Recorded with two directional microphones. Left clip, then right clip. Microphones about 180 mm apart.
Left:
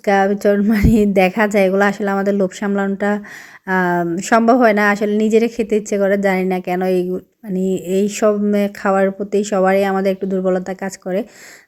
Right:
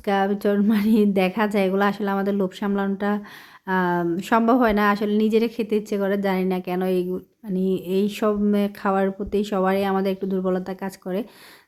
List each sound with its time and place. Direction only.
0.0 s speech: 15° left (ahead or behind)